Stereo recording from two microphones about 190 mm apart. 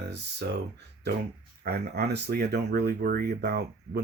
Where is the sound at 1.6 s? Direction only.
55° right (ahead or behind).